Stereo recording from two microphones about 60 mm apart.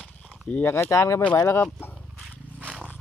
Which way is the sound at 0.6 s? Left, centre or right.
Left.